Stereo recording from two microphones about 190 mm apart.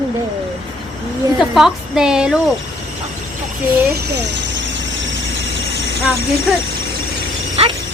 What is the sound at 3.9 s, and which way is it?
Squeal, 60° right (ahead or behind).